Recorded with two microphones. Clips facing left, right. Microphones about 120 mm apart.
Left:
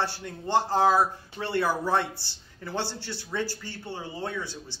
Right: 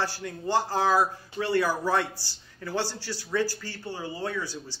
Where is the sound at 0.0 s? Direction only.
25° left (ahead or behind).